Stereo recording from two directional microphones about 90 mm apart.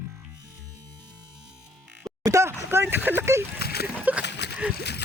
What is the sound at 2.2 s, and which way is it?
Chopping, 35° right (ahead or behind).